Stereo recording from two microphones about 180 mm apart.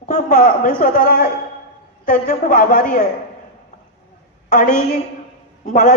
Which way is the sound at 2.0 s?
45° left (ahead or behind).